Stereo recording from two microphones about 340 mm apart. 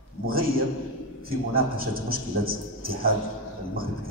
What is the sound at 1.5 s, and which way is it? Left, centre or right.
A man's voice, right.